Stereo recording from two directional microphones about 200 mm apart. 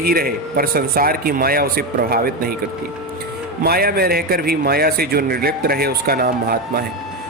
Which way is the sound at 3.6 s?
50° right (ahead or behind).